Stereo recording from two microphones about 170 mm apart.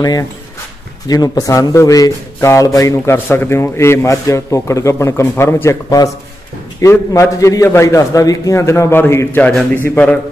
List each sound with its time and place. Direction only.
0.0 s speech: 20° left (ahead or behind)